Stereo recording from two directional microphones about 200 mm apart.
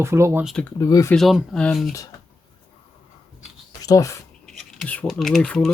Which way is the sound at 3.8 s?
15° left (ahead or behind).